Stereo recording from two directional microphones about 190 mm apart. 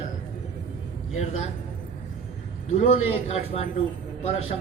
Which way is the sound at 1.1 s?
35° left (ahead or behind).